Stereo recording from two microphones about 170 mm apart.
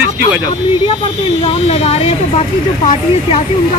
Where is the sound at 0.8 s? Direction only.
30° left (ahead or behind).